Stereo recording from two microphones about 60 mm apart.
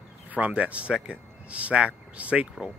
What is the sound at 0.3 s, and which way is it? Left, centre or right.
Speech, right.